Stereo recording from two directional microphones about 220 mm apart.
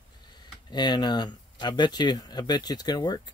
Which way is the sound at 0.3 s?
20° left (ahead or behind).